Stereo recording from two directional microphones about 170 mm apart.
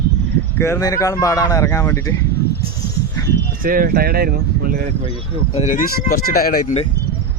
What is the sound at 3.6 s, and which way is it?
Speech, 60° right (ahead or behind).